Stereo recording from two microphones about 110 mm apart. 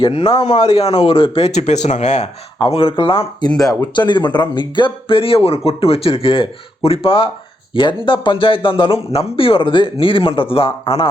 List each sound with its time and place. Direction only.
0.0 s speech: 50° left (ahead or behind); by 2.3 s 90° left
2.6 s speech: 60° left (ahead or behind)
3.6 s speech: 30° left (ahead or behind)
3.9 s speech: 45° left (ahead or behind)